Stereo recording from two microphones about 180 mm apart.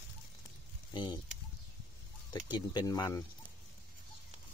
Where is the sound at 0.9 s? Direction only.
25° left (ahead or behind).